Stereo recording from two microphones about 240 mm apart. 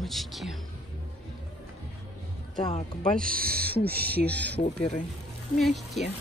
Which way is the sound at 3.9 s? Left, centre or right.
Right.